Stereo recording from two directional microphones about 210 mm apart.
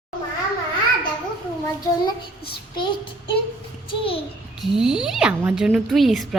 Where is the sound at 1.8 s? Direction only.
20° left (ahead or behind).